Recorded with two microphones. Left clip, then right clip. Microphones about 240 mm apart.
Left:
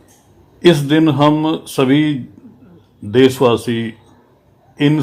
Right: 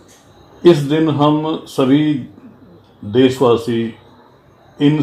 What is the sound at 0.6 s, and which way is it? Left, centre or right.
Speech, left.